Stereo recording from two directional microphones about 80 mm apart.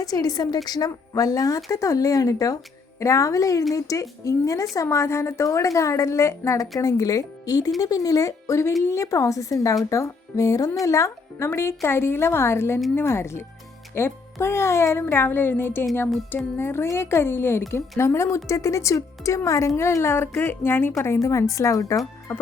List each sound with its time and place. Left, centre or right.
0.0 s a woman's voice: left
17.6 s speech: left
21.2 s a woman's voice: left
22.3 s music: left